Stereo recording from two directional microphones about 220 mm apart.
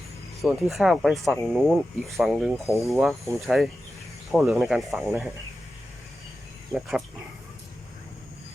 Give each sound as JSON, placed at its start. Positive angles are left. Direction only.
{"t": 0.4, "sound": "speech", "side_deg": 0}
{"t": 6.7, "sound": "speech", "side_deg": 0}